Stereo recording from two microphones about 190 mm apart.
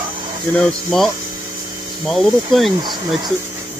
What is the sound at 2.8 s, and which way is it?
Speech, 20° right (ahead or behind).